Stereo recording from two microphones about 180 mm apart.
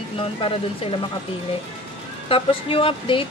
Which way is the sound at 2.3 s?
30° left (ahead or behind).